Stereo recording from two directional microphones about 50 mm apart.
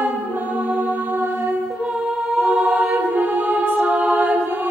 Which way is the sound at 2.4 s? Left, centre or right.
Right.